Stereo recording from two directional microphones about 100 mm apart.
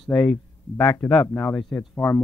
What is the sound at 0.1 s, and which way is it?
Speech, 45° left (ahead or behind).